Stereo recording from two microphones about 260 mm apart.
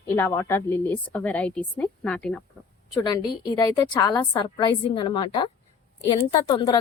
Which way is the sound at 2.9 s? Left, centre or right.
Centre.